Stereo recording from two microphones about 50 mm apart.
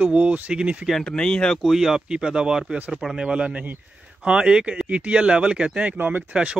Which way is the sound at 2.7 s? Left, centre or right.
Right.